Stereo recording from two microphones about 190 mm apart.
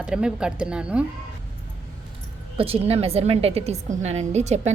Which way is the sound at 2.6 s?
30° right (ahead or behind).